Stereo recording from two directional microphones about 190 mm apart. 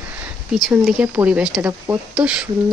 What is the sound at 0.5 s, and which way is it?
A woman's voice, centre (ahead or behind).